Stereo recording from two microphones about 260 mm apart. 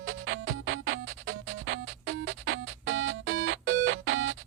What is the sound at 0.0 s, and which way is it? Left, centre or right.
Music, right.